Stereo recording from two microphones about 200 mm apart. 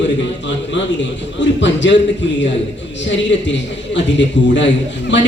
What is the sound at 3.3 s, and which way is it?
A man's voice, 60° left (ahead or behind).